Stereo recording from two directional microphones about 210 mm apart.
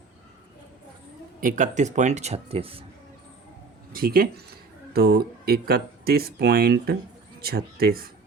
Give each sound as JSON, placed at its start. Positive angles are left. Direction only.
{"t": 1.4, "sound": "speech", "side_deg": -40}
{"t": 3.9, "sound": "speech", "side_deg": -45}